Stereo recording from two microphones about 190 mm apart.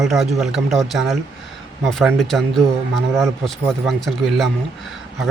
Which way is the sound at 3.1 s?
15° right (ahead or behind).